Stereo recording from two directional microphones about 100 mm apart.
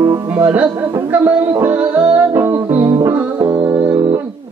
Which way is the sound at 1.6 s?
20° right (ahead or behind).